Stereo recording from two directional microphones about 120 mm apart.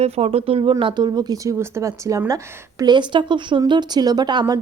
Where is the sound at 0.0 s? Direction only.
60° right (ahead or behind).